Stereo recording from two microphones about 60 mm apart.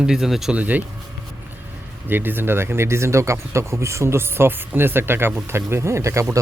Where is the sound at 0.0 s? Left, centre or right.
Centre.